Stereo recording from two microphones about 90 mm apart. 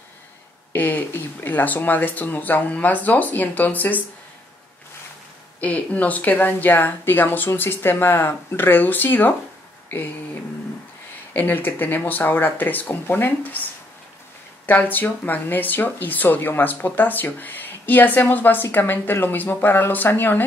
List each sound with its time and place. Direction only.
0.7 s speech: 20° left (ahead or behind)
5.6 s speech: 15° left (ahead or behind)
11.3 s speech: 20° left (ahead or behind)
14.7 s speech: 20° left (ahead or behind)